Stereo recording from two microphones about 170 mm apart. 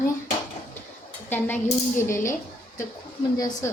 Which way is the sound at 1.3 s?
10° left (ahead or behind).